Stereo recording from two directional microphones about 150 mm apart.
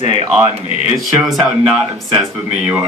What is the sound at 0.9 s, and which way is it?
A man's voice, 5° right (ahead or behind).